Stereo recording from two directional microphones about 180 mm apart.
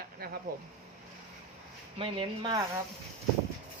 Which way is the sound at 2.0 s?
30° right (ahead or behind).